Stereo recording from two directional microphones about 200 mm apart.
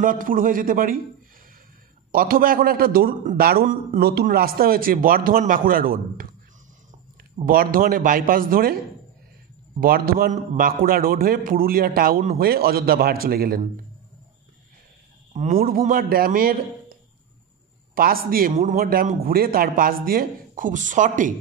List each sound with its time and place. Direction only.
0.0 s a man's voice: 40° right (ahead or behind)
2.1 s a man's voice: 45° right (ahead or behind)
7.4 s a man's voice: 45° right (ahead or behind)
9.8 s a man's voice: 45° right (ahead or behind)
15.3 s a man's voice: 40° right (ahead or behind)